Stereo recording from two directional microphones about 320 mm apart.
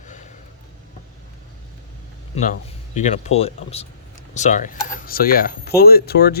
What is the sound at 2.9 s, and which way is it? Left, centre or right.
Speech, left.